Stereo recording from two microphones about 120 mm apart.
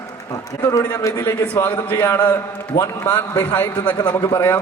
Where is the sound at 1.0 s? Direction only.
25° left (ahead or behind).